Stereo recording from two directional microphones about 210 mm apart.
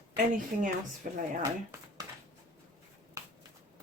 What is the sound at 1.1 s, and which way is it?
Speech, 35° right (ahead or behind).